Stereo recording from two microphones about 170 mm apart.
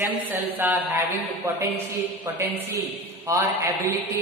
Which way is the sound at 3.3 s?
20° right (ahead or behind).